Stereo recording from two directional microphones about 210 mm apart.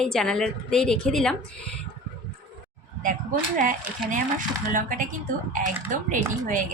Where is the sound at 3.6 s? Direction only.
40° right (ahead or behind).